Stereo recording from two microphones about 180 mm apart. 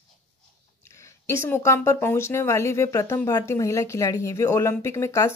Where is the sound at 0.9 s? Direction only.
15° left (ahead or behind).